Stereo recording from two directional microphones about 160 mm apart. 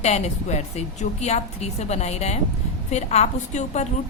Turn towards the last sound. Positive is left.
turn(degrees=45)  # may be behind; listen again after turning